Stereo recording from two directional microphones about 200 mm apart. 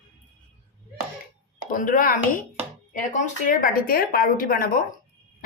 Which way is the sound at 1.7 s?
40° left (ahead or behind).